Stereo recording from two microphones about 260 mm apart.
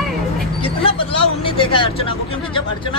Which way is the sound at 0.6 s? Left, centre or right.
Left.